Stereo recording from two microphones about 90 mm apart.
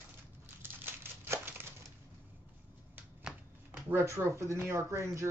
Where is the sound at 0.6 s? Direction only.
25° right (ahead or behind).